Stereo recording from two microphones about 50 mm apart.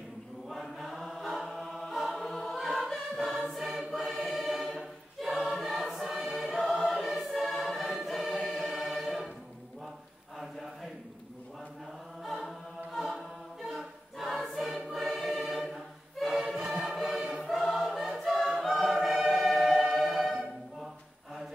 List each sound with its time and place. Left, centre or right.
0.5 s choir: centre
10.3 s chant: centre
12.2 s choir: centre
16.7 s music: centre
17.5 s choir: centre